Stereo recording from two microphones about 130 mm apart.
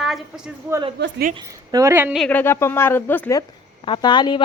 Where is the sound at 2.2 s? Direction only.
15° left (ahead or behind).